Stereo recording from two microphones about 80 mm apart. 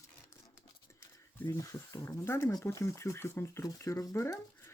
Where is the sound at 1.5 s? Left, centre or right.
Left.